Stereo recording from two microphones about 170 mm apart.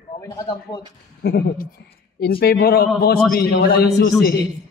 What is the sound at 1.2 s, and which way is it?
Speech, 75° left (ahead or behind).